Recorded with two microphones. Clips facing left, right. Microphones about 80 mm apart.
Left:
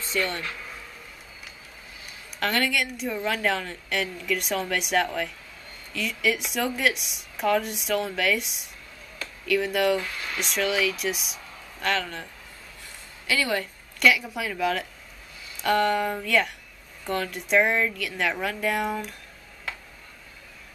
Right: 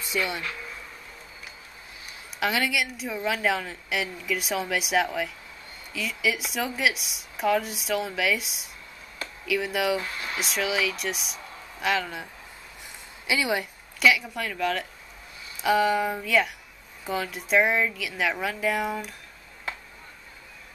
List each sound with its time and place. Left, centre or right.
0.0 s speech: centre
2.4 s a woman's voice: centre
10.0 s speech: right
10.3 s a woman's voice: centre
13.3 s speech: centre
13.9 s a woman's voice: centre